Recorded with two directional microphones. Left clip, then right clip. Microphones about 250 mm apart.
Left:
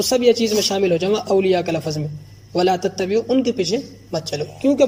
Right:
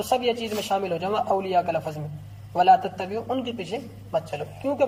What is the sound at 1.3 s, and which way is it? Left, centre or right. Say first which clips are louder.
Speech: left 5 dB; left.